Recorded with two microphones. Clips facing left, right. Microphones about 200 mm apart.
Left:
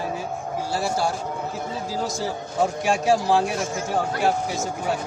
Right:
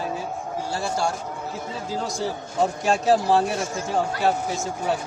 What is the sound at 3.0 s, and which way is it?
Speech, centre (ahead or behind).